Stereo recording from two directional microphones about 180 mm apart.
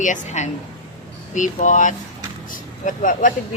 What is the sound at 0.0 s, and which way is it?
Speech, 40° left (ahead or behind).